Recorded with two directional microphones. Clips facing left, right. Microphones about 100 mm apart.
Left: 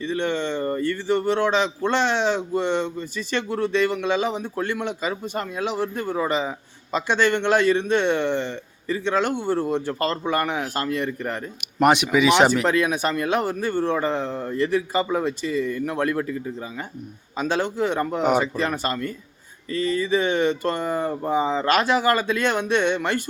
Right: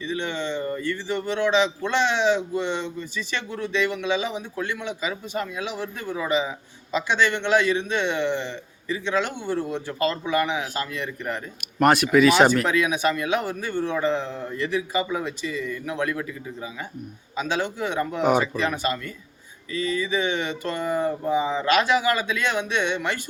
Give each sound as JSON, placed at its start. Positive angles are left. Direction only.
{"t": 0.0, "sound": "speech", "side_deg": 50}
{"t": 11.8, "sound": "speech", "side_deg": 15}
{"t": 12.6, "sound": "speech", "side_deg": 45}